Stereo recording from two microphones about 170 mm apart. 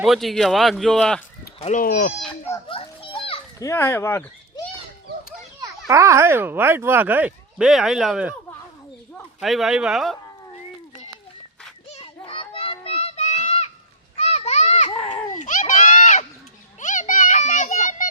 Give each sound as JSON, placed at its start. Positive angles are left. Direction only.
{"t": 0.0, "sound": "a man's voice", "side_deg": 0}
{"t": 1.5, "sound": "speech", "side_deg": 40}
{"t": 1.8, "sound": "speech", "side_deg": 55}
{"t": 2.6, "sound": "children playing", "side_deg": 30}
{"t": 3.6, "sound": "speech", "side_deg": 15}
{"t": 5.9, "sound": "speech", "side_deg": -15}
{"t": 9.4, "sound": "a man's voice", "side_deg": 0}
{"t": 11.9, "sound": "children playing", "side_deg": 30}
{"t": 15.4, "sound": "a sound", "side_deg": 45}
{"t": 16.8, "sound": "children playing", "side_deg": 45}